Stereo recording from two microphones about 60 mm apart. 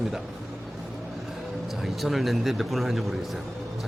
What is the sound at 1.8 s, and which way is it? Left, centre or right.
Speech, centre.